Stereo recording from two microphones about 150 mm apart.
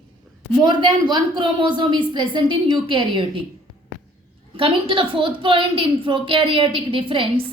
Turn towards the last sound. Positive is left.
turn(degrees=-35)  # may be behind; listen again after turning